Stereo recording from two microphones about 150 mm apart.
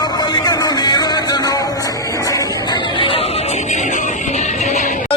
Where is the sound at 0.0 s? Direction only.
25° left (ahead or behind); by 5.1 s 60° left (ahead or behind).